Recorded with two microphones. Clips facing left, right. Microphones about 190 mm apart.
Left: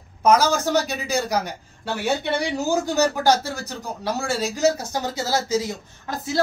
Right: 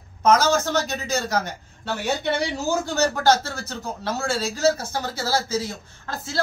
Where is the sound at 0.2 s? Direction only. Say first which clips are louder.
Even; 10° left (ahead or behind).